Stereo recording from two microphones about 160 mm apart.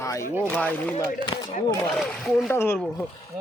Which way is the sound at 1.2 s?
30° left (ahead or behind).